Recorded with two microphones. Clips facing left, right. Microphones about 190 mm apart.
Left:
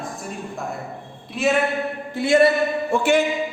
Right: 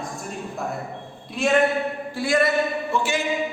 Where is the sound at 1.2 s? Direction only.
Centre (ahead or behind).